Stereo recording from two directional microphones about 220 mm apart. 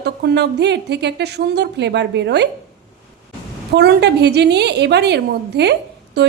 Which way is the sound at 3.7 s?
50° right (ahead or behind).